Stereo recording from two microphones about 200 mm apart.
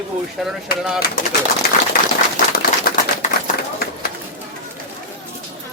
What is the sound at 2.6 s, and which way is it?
Typewriter, 45° left (ahead or behind).